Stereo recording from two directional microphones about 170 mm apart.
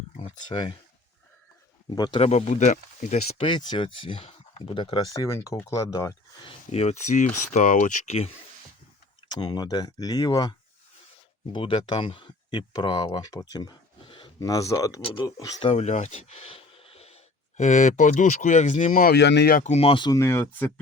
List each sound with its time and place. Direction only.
0.2 s speech: 25° left (ahead or behind)
1.9 s speech: 25° left (ahead or behind)
2.2 s speech: 40° left (ahead or behind); by 6.5 s 20° left (ahead or behind)
6.7 s speech: 40° left (ahead or behind)
9.3 s speech: 25° left (ahead or behind)
15.6 s speech: 35° left (ahead or behind)
19.1 s speech: 85° left; by 19.6 s 70° left (ahead or behind)
19.6 s speech: 35° left (ahead or behind); by 20.7 s 10° left (ahead or behind)